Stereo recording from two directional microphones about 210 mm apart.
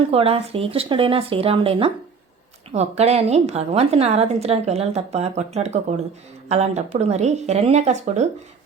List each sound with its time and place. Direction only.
0.1 s a woman's voice: 30° right (ahead or behind)